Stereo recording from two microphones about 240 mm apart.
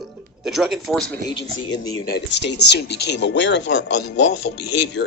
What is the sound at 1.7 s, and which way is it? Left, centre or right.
Speech, left.